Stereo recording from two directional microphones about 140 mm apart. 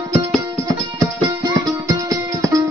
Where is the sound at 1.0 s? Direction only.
25° right (ahead or behind).